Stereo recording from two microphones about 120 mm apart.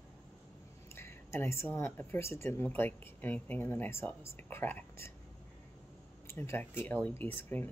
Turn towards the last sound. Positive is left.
turn(degrees=15)  # may be behind; listen again after turning